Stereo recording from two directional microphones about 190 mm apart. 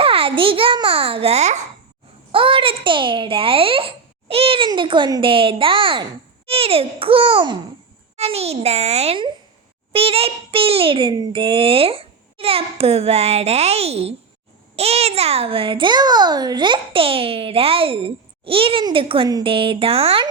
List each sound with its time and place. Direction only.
0.0 s a child's voice: 30° right (ahead or behind)